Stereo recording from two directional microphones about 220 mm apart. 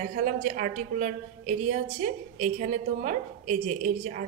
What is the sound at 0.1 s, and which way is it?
A woman's voice, 35° right (ahead or behind).